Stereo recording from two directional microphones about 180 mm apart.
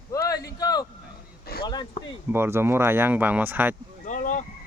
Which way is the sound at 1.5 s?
55° left (ahead or behind).